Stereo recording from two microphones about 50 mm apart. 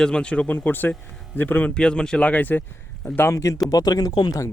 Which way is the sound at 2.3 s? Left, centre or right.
Left.